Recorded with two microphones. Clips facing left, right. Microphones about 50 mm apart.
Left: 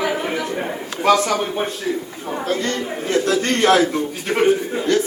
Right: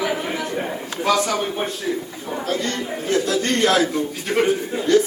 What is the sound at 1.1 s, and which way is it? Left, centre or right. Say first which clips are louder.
Speech: left 4 dB; left.